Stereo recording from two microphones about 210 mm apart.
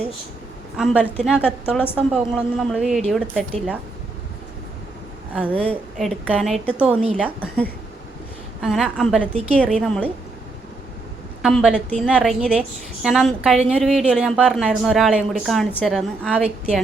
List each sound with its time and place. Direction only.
0.8 s a woman's voice: 10° left (ahead or behind)
5.3 s a woman's voice: 5° right (ahead or behind)
6.8 s speech: 30° right (ahead or behind)
7.2 s a woman's voice: 5° left (ahead or behind)
11.4 s a woman's voice: centre (ahead or behind)